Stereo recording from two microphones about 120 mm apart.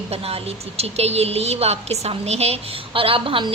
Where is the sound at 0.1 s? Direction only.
55° right (ahead or behind).